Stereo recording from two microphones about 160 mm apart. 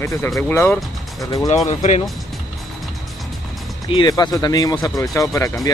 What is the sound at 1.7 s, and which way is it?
Speech, 45° left (ahead or behind).